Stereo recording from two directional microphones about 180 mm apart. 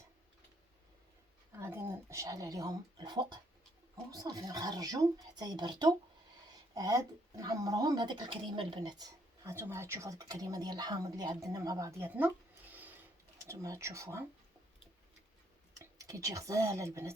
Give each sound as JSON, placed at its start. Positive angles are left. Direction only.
{"t": 1.5, "sound": "speech", "side_deg": -15}
{"t": 13.5, "sound": "speech", "side_deg": -15}
{"t": 15.8, "sound": "speech", "side_deg": -20}